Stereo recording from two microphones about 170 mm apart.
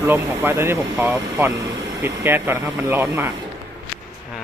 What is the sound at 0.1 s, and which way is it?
Speech, 15° right (ahead or behind).